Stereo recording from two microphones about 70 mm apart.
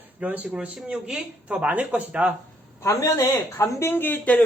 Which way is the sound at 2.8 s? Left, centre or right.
Left.